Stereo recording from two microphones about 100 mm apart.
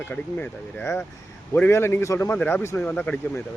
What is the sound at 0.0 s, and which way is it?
Speech, 15° left (ahead or behind).